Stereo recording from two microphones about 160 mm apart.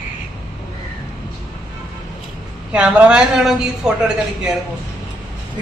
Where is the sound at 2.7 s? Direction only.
5° right (ahead or behind).